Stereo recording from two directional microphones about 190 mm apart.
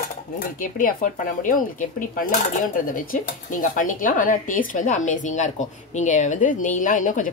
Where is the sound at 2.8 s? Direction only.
45° left (ahead or behind).